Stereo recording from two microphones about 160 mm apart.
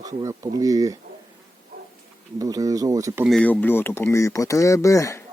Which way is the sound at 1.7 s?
65° right (ahead or behind).